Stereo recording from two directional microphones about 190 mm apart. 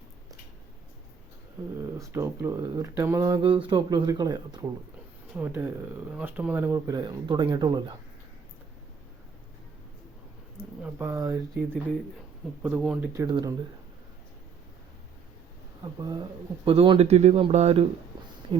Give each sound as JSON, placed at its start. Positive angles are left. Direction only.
{"t": 1.8, "sound": "speech", "side_deg": -15}
{"t": 3.4, "sound": "speech", "side_deg": -25}
{"t": 5.3, "sound": "speech", "side_deg": -10}
{"t": 10.8, "sound": "speech", "side_deg": -15}
{"t": 12.6, "sound": "speech", "side_deg": -5}
{"t": 13.2, "sound": "speech", "side_deg": -20}
{"t": 15.8, "sound": "speech", "side_deg": -20}